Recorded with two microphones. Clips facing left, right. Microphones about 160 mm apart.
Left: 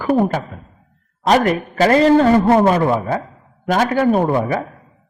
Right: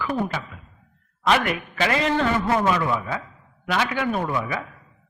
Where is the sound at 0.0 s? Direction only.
45° left (ahead or behind).